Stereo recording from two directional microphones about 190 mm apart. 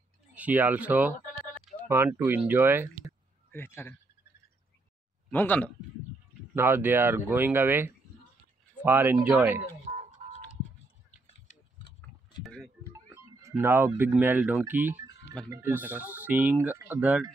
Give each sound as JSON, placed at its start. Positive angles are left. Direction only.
{"t": 0.3, "sound": "speech", "side_deg": -10}
{"t": 1.6, "sound": "a sound", "side_deg": 0}
{"t": 1.9, "sound": "speech", "side_deg": -10}
{"t": 3.5, "sound": "speech", "side_deg": 10}
{"t": 5.3, "sound": "speech", "side_deg": 10}
{"t": 6.5, "sound": "speech", "side_deg": -10}
{"t": 10.2, "sound": "music", "side_deg": -40}
{"t": 12.4, "sound": "a sound", "side_deg": 0}
{"t": 12.8, "sound": "a sound", "side_deg": -10}
{"t": 13.6, "sound": "speech", "side_deg": -10}